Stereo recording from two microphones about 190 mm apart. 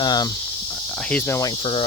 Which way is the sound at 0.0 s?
20° left (ahead or behind).